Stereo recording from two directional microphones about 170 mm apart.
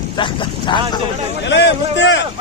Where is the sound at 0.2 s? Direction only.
30° left (ahead or behind).